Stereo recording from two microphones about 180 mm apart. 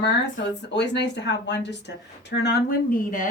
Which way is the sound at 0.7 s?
70° left (ahead or behind).